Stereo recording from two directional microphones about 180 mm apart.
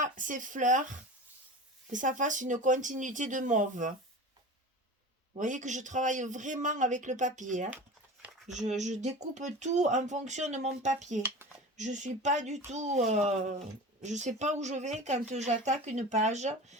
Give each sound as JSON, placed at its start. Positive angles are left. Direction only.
{"t": 0.0, "sound": "a man's voice", "side_deg": -45}
{"t": 5.3, "sound": "a man's voice", "side_deg": -45}